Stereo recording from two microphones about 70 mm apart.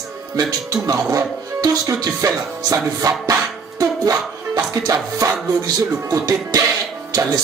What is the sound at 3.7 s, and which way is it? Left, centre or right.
Music, right.